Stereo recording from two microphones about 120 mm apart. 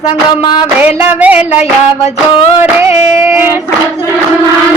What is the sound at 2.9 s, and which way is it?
Speech, 70° left (ahead or behind).